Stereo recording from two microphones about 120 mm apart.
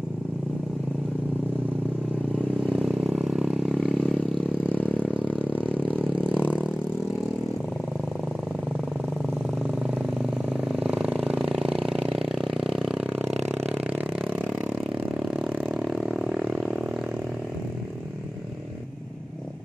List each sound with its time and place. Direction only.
2.6 s vehicle: centre (ahead or behind)
6.4 s vehicle: 15° left (ahead or behind)
9.2 s vehicle: 10° right (ahead or behind)
11.2 s a sound: 5° right (ahead or behind)
13.2 s a sound: 65° right (ahead or behind)
14.1 s vehicle: 5° left (ahead or behind)